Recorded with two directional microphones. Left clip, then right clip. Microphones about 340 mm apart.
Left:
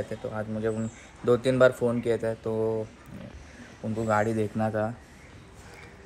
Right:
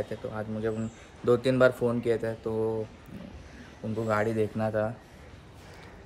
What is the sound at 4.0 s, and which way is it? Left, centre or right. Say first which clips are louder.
Speech: left 2 dB; centre.